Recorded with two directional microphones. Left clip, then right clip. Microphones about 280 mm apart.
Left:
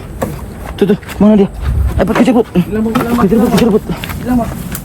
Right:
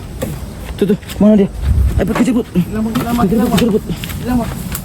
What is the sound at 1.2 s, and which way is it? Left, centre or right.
Speech, left.